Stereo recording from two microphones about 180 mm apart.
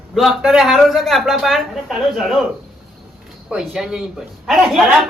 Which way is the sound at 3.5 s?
Centre (ahead or behind).